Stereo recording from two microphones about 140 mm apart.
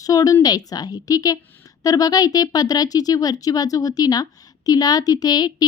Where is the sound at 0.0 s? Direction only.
25° left (ahead or behind).